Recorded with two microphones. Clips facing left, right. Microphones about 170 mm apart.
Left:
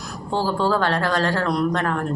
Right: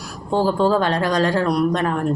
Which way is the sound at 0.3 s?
15° right (ahead or behind).